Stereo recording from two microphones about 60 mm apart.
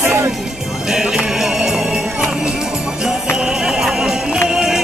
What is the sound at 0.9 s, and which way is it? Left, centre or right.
Jingle bell, centre.